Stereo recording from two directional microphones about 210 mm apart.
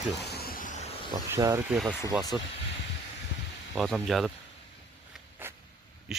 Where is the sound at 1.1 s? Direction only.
15° right (ahead or behind).